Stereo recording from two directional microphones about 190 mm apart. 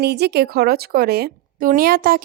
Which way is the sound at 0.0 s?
60° right (ahead or behind).